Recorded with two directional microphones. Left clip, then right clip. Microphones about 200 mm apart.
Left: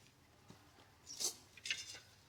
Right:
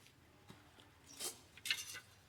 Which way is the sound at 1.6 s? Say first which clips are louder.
Right 2 dB; 20° right (ahead or behind).